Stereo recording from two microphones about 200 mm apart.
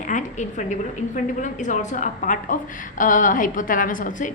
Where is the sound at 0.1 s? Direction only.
40° left (ahead or behind).